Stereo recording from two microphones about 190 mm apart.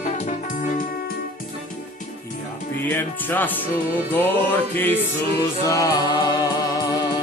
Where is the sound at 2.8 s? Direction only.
10° left (ahead or behind).